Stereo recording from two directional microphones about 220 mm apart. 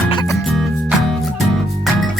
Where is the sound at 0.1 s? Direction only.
20° left (ahead or behind).